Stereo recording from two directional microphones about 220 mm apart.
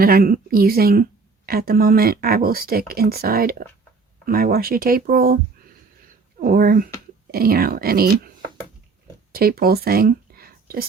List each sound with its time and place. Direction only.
0.0 s speech: 40° right (ahead or behind)
6.4 s speech: 40° right (ahead or behind)
9.3 s speech: 45° right (ahead or behind)